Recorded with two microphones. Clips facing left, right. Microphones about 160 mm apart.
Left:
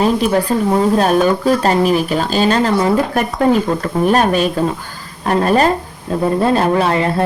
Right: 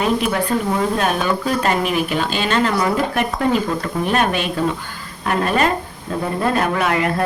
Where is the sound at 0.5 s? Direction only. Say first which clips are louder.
Left 5 dB; 30° left (ahead or behind).